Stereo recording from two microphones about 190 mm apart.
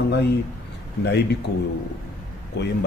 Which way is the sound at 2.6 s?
65° left (ahead or behind).